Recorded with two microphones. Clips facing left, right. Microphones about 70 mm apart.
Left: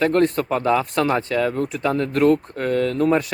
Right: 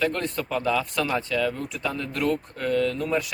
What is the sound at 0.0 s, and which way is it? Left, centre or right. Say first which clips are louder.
Speech: left 8 dB; left.